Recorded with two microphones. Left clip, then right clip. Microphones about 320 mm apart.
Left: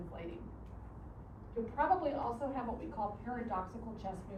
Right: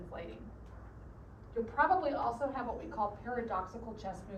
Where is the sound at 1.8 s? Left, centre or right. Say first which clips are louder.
Right 3 dB; right.